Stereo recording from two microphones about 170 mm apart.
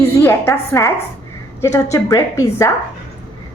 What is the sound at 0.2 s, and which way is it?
A woman's voice, 15° left (ahead or behind).